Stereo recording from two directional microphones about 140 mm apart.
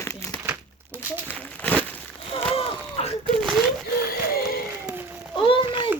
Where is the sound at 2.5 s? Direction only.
40° left (ahead or behind).